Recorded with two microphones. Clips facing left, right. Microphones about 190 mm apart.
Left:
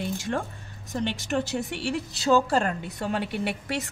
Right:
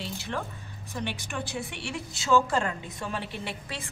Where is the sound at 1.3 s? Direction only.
40° left (ahead or behind).